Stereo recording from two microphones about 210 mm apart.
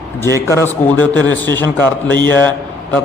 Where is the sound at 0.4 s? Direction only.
10° left (ahead or behind).